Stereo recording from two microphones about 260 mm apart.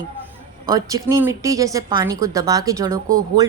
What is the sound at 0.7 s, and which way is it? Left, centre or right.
Speech, centre.